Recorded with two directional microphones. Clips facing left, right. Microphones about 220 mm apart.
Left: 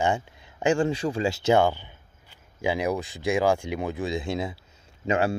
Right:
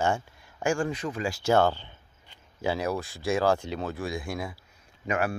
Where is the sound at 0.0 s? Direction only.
20° left (ahead or behind).